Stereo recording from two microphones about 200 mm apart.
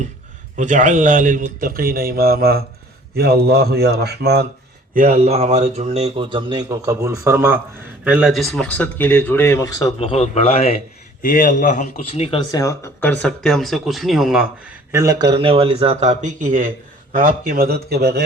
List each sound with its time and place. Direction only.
0.5 s a man's voice: 40° right (ahead or behind); by 4.4 s 55° right (ahead or behind)
4.9 s speech: 35° right (ahead or behind); by 9.9 s 15° left (ahead or behind)
10.0 s a man's voice: 30° left (ahead or behind)
11.2 s speech: 45° left (ahead or behind); by 14.8 s centre (ahead or behind)
14.9 s speech: 15° right (ahead or behind); by 18.3 s 55° right (ahead or behind)